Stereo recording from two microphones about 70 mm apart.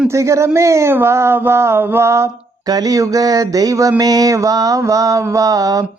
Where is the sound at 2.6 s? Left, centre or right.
Right.